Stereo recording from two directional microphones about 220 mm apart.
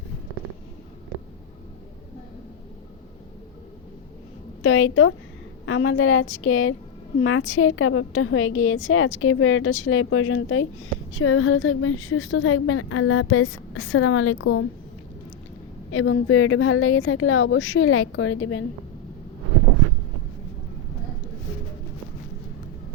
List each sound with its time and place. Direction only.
4.6 s a woman's voice: 65° left (ahead or behind)
15.9 s a woman's voice: 65° left (ahead or behind)